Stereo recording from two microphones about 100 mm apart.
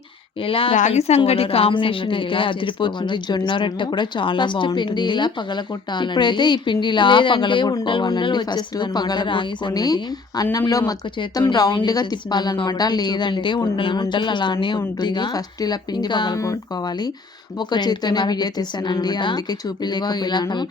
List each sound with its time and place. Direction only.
0.4 s speech: 65° left (ahead or behind)
9.7 s speech: 40° left (ahead or behind)
17.6 s speech: 45° left (ahead or behind)